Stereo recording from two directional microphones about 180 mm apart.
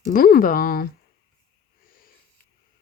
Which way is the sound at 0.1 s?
55° left (ahead or behind).